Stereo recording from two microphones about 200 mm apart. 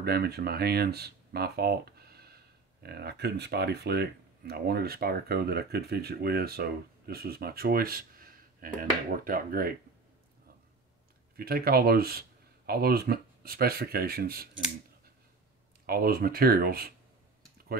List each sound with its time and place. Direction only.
0.0 s speech: 50° right (ahead or behind)
11.3 s speech: 50° right (ahead or behind)
15.9 s speech: 50° right (ahead or behind)